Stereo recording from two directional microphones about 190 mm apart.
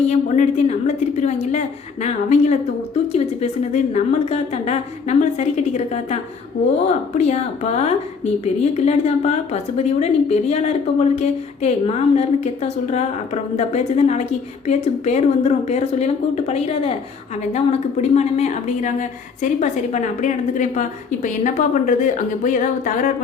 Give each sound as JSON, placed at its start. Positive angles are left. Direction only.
{"t": 0.1, "sound": "a woman's voice", "side_deg": 35}